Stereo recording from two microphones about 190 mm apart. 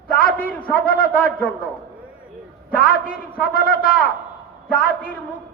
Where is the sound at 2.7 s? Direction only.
50° left (ahead or behind).